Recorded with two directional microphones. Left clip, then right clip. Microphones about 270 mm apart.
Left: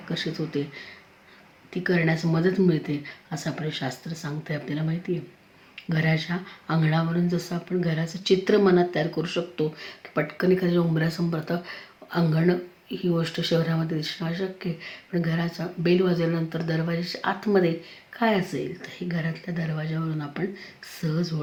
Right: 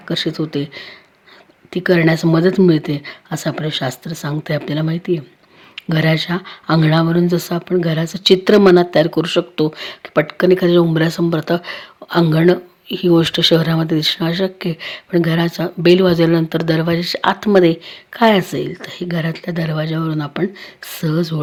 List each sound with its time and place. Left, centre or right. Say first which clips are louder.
0.1 s speech: right 10 dB; right